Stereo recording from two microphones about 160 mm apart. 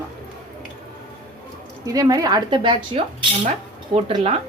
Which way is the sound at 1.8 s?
20° right (ahead or behind).